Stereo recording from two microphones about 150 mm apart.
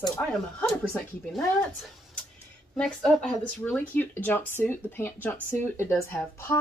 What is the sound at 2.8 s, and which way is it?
Speech, 5° left (ahead or behind).